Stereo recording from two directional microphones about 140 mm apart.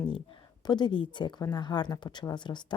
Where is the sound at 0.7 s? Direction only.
35° left (ahead or behind).